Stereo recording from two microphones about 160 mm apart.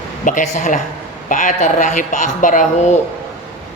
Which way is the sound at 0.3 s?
50° left (ahead or behind).